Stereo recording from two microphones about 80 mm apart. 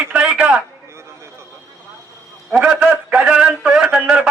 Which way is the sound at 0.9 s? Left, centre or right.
Right.